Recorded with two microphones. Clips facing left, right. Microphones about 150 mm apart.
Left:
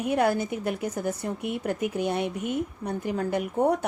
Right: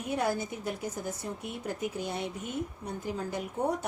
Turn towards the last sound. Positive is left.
turn(degrees=65)  # may be behind; listen again after turning